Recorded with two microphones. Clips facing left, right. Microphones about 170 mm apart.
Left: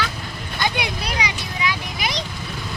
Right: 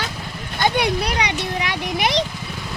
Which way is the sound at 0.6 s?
60° right (ahead or behind).